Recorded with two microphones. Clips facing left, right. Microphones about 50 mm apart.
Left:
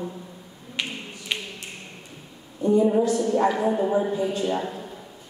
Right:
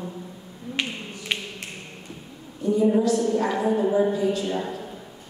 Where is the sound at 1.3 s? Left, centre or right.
Centre.